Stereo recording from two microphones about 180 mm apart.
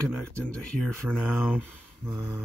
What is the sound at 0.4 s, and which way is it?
Speech, 5° left (ahead or behind).